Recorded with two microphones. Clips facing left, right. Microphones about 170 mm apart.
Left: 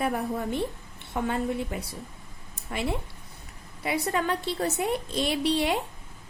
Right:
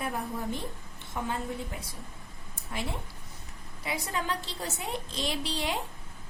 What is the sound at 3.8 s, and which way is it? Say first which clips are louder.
A woman's voice: left 6 dB; 60° left (ahead or behind).